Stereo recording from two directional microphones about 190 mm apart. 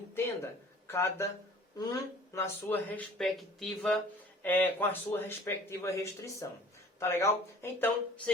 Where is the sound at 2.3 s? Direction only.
10° left (ahead or behind).